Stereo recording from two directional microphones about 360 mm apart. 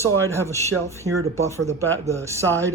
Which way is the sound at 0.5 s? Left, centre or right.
Centre.